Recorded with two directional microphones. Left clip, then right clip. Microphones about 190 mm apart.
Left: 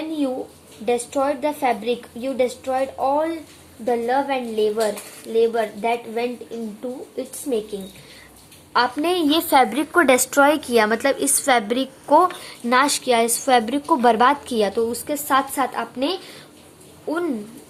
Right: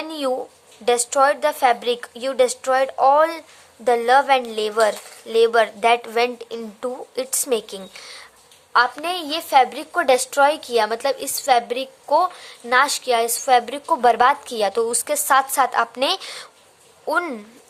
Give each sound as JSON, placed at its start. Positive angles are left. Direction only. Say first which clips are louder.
{"t": 0.9, "sound": "a woman's voice", "louder": "right 4 dB", "side_deg": -40}
{"t": 8.7, "sound": "a woman's voice", "louder": "right 1 dB", "side_deg": -30}